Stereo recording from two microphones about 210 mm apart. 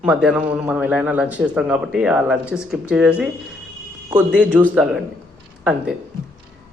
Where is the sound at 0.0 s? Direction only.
5° right (ahead or behind).